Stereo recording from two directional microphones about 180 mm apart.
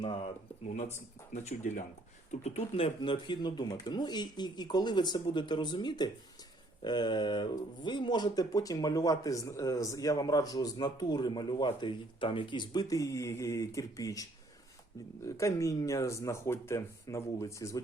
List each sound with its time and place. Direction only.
0.0 s speech: 25° left (ahead or behind)
1.3 s speech: 40° left (ahead or behind); by 17.8 s 15° left (ahead or behind)